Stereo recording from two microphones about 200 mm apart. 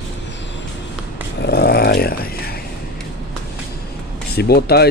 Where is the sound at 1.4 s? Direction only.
55° left (ahead or behind).